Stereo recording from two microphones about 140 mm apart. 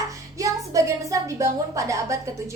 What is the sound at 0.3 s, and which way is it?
A woman's voice, 25° right (ahead or behind).